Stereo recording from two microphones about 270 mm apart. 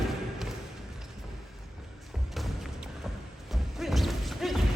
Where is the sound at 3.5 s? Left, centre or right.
Centre.